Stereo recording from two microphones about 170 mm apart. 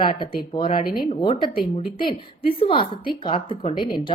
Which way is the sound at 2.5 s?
30° left (ahead or behind).